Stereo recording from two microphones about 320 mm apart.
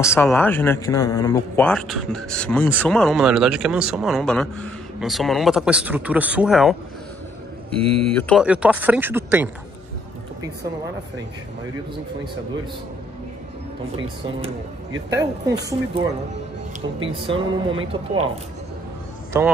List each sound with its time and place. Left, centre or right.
0.1 s speech: centre
8.1 s speech: centre
15.1 s a woman's voice: centre
19.3 s a woman's voice: centre